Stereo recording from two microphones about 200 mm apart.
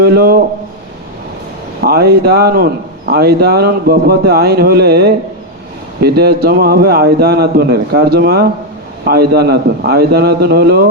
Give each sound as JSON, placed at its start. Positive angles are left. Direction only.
{"t": 0.0, "sound": "a man's voice", "side_deg": -50}
{"t": 1.8, "sound": "a man's voice", "side_deg": -50}